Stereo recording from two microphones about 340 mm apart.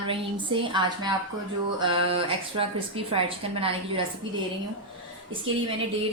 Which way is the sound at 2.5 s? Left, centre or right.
Centre.